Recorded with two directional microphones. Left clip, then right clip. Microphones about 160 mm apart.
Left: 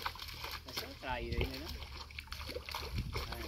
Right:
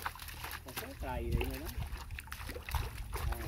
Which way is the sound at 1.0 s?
60° right (ahead or behind).